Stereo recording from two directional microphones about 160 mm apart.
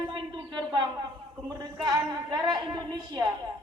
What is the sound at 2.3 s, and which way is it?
Speech, 25° right (ahead or behind).